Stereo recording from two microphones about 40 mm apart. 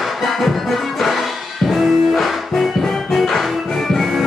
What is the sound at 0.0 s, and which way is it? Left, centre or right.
Music, centre.